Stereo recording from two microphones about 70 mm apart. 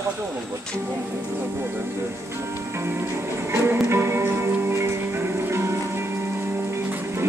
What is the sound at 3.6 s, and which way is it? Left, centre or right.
Music, right.